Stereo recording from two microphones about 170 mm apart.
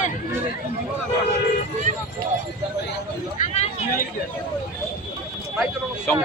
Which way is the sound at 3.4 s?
40° left (ahead or behind).